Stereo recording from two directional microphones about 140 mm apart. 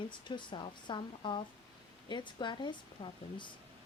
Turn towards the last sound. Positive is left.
turn(degrees=35)  # may be behind; listen again after turning